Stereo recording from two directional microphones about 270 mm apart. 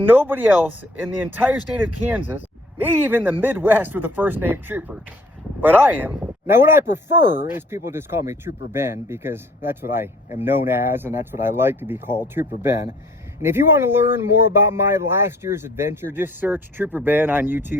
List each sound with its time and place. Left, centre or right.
0.0 s speech: centre
7.2 s speech: left
7.5 s speech: centre